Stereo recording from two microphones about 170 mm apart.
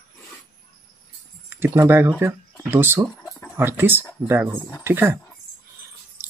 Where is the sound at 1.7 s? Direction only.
15° right (ahead or behind).